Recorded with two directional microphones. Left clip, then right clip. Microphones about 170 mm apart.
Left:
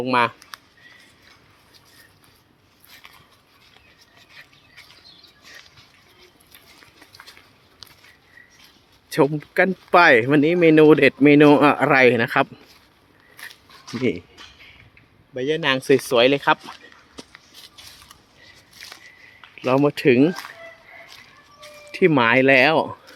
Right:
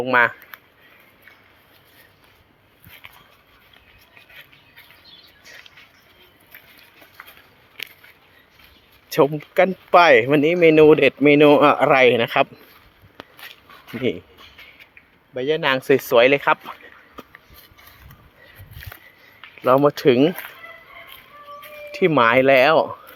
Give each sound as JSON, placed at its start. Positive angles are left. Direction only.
{"t": 0.0, "sound": "speech", "side_deg": 20}
{"t": 9.0, "sound": "a sound", "side_deg": 10}
{"t": 9.6, "sound": "speech", "side_deg": 20}
{"t": 14.0, "sound": "speech", "side_deg": 20}
{"t": 15.4, "sound": "speech", "side_deg": 10}
{"t": 17.2, "sound": "a sound", "side_deg": -45}
{"t": 19.5, "sound": "speech", "side_deg": 15}
{"t": 21.9, "sound": "speech", "side_deg": 25}